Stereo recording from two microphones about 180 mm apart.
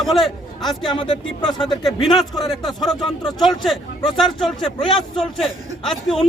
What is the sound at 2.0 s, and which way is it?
Speech, centre (ahead or behind).